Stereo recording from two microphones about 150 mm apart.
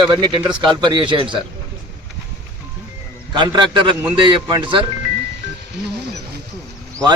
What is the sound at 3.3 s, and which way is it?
A man's voice, 30° right (ahead or behind).